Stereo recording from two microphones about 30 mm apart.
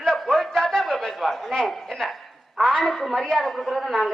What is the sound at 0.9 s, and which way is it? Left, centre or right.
Chatter, centre.